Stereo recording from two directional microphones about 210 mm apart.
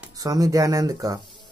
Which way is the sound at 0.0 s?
15° right (ahead or behind).